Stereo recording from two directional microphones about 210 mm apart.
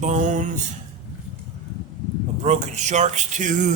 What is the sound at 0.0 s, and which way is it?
Speech, 35° right (ahead or behind).